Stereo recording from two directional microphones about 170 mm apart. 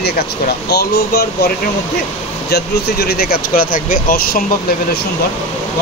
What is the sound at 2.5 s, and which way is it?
Speech, 65° left (ahead or behind).